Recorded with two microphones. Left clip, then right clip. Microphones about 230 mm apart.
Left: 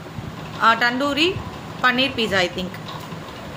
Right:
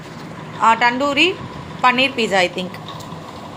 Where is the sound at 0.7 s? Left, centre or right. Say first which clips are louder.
Right 4 dB; left.